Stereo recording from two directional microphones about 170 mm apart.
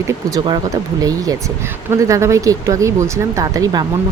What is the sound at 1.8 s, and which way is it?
Speech, 15° right (ahead or behind).